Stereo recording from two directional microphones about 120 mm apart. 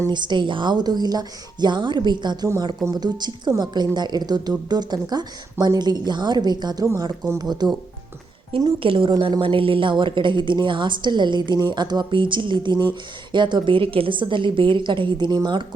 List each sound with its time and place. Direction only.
0.0 s a woman's voice: 40° right (ahead or behind)
8.8 s a woman's voice: 45° right (ahead or behind)